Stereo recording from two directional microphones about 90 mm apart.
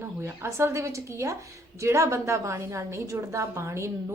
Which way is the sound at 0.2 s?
30° right (ahead or behind).